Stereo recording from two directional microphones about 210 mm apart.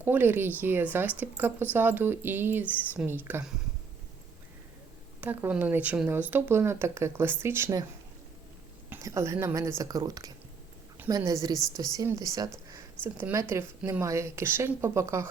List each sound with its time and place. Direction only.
0.0 s speech: 10° right (ahead or behind)
5.2 s speech: 10° right (ahead or behind)
8.9 s a woman's voice: 15° right (ahead or behind)
12.7 s a sound: 10° right (ahead or behind)
13.5 s speech: 10° right (ahead or behind)